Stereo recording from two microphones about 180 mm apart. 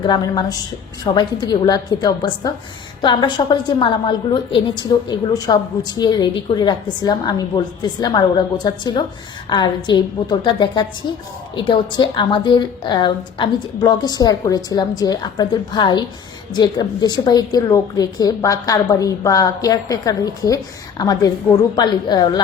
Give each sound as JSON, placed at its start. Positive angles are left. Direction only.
{"t": 0.0, "sound": "a woman's voice", "side_deg": 25}